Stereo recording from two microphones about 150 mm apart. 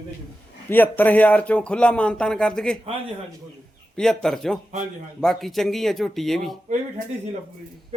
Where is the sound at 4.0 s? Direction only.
5° left (ahead or behind).